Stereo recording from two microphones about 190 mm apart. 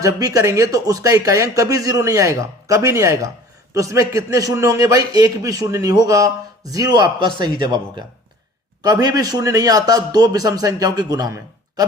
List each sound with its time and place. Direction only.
0.0 s a man's voice: 20° right (ahead or behind)